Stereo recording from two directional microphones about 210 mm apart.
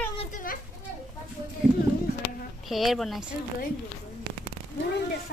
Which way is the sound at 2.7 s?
Centre (ahead or behind).